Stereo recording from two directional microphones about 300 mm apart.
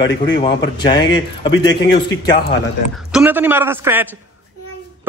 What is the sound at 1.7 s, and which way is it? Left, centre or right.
Speech, left.